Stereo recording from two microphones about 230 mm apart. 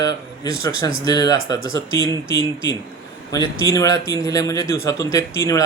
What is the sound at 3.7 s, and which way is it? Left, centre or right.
A man's voice, centre.